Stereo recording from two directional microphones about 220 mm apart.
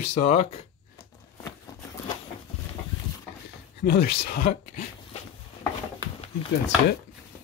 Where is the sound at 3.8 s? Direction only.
45° left (ahead or behind).